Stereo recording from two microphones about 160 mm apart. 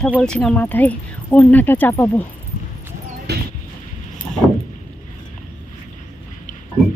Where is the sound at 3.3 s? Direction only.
90° right.